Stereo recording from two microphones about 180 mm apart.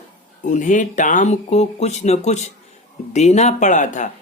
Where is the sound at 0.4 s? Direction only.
45° left (ahead or behind).